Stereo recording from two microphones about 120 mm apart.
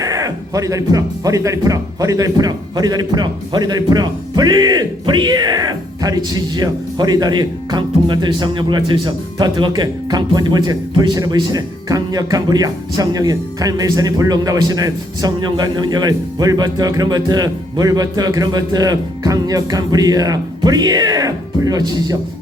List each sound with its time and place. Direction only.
0.0 s speech: 30° right (ahead or behind)